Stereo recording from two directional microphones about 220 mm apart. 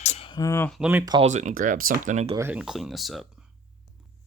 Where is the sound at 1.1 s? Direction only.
30° right (ahead or behind).